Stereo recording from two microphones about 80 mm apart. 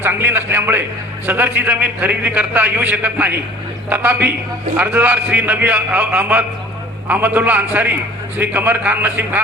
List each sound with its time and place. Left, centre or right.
0.0 s a man's voice: right